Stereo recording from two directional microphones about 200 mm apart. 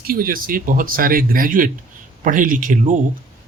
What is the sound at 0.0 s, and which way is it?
A man's voice, 45° right (ahead or behind).